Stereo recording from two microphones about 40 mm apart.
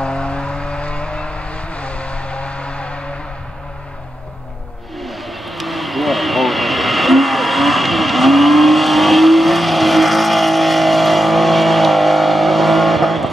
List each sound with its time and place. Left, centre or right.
0.0 s vehicle: left
5.0 s vehicle: centre